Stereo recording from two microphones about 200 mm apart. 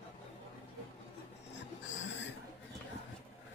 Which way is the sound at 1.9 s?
65° left (ahead or behind).